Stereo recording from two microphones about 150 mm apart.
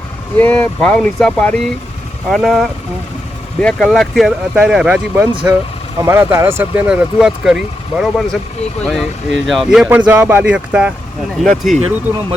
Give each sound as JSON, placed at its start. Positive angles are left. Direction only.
{"t": 0.3, "sound": "speech", "side_deg": 10}
{"t": 5.4, "sound": "speech", "side_deg": -15}